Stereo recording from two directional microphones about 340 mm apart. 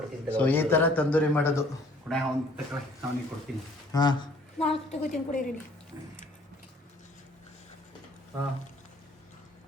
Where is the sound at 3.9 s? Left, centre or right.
Centre.